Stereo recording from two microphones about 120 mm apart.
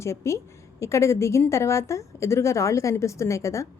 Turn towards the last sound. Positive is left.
turn(degrees=25)  # may be behind; listen again after turning